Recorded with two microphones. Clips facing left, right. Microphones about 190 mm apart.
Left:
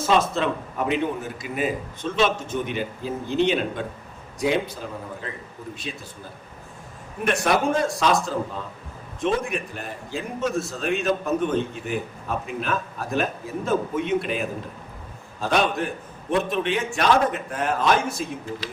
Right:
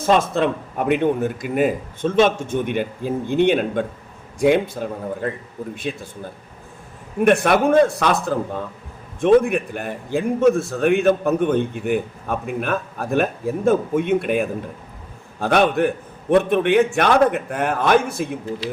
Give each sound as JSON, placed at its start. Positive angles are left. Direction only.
{"t": 0.1, "sound": "a man's voice", "side_deg": -50}
{"t": 5.9, "sound": "a man's voice", "side_deg": -50}
{"t": 7.3, "sound": "a man's voice", "side_deg": -55}